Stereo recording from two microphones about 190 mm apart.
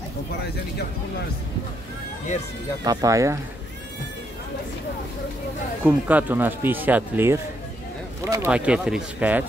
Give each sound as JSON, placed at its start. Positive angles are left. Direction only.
{"t": 2.8, "sound": "speech", "side_deg": -20}
{"t": 5.9, "sound": "speech", "side_deg": -10}